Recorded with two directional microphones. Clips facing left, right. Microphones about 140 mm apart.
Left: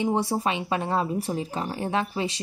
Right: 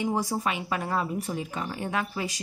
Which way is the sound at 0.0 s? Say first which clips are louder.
Left 3 dB; 25° left (ahead or behind).